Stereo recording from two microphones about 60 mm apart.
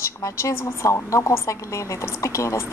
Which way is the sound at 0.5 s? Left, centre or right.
Left.